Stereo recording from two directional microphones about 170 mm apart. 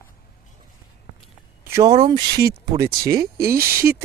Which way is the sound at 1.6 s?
15° right (ahead or behind).